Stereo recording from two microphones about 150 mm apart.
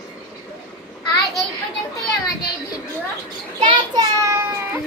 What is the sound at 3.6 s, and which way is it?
Speech, 35° right (ahead or behind).